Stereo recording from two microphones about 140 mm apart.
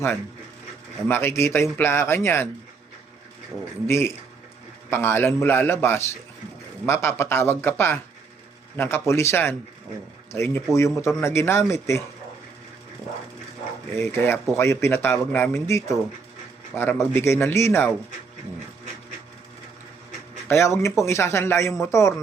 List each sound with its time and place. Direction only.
1.0 s a man's voice: 15° left (ahead or behind)
3.8 s a man's voice: 20° left (ahead or behind)
14.0 s a man's voice: 15° left (ahead or behind)
20.5 s speech: 20° left (ahead or behind)